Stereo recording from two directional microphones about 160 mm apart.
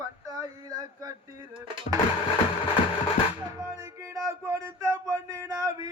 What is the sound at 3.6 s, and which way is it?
Music, 20° right (ahead or behind).